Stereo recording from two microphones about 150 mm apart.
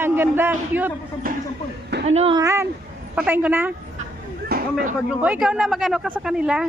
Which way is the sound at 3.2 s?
10° right (ahead or behind).